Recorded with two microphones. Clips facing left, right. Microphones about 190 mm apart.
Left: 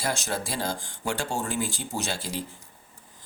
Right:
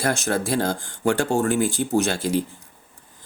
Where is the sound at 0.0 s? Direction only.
60° right (ahead or behind).